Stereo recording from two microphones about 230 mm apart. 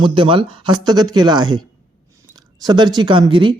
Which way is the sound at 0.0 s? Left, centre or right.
Right.